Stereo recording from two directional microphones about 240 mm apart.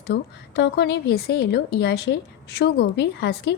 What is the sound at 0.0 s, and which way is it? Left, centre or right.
A woman's voice, left.